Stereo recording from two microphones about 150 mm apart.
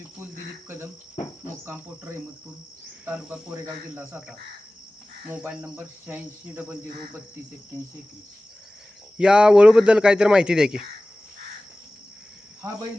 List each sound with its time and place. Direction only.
1.6 s speech: 15° right (ahead or behind)
3.1 s cricket: 10° right (ahead or behind)
5.3 s cricket: 10° right (ahead or behind)
9.1 s speech: 5° right (ahead or behind)